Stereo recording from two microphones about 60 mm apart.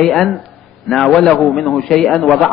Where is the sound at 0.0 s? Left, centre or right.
Centre.